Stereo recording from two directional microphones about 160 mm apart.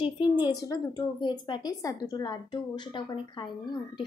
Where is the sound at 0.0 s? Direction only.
25° left (ahead or behind).